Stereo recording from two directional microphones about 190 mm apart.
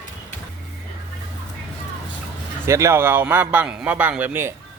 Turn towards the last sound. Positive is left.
turn(degrees=-10)  # may be behind; listen again after turning